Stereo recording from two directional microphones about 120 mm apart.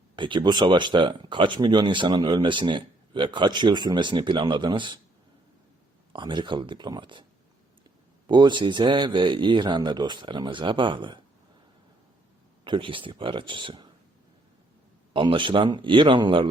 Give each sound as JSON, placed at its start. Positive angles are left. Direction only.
{"t": 0.2, "sound": "speech", "side_deg": -40}
{"t": 6.1, "sound": "speech", "side_deg": -40}
{"t": 8.3, "sound": "speech", "side_deg": -40}
{"t": 12.6, "sound": "speech", "side_deg": -45}
{"t": 15.1, "sound": "speech", "side_deg": -45}